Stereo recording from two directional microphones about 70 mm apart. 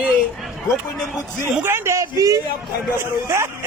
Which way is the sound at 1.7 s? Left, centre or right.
Right.